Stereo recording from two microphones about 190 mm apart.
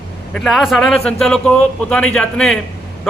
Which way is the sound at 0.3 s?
Centre (ahead or behind).